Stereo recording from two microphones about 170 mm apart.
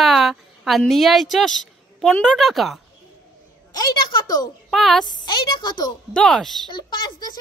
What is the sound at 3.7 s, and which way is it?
Speech, 25° left (ahead or behind).